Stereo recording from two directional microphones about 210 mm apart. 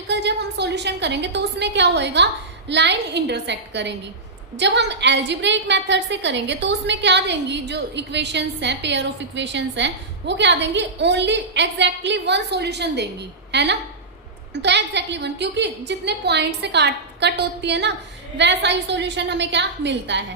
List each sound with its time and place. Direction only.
0.1 s a woman's voice: 55° right (ahead or behind)